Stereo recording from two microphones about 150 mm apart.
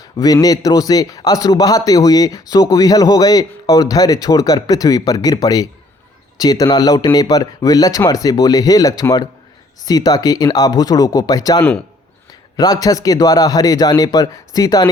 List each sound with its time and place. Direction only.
0.3 s speech: 25° left (ahead or behind)